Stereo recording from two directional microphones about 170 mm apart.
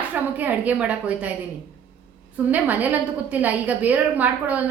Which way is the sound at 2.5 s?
10° right (ahead or behind).